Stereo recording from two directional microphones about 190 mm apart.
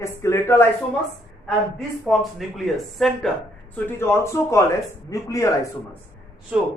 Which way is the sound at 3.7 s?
10° left (ahead or behind).